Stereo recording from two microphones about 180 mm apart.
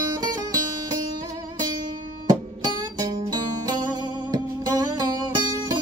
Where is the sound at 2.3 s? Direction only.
20° right (ahead or behind).